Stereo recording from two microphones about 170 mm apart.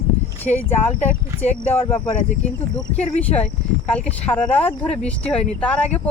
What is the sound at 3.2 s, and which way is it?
Speech, 10° left (ahead or behind).